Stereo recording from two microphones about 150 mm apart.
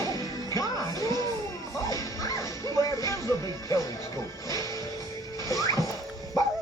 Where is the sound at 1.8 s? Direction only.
25° left (ahead or behind).